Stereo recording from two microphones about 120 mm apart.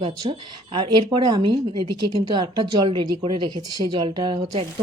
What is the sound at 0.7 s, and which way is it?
Speech, 40° right (ahead or behind).